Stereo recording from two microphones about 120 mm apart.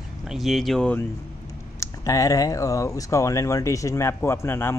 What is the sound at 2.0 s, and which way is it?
Speech, 25° left (ahead or behind).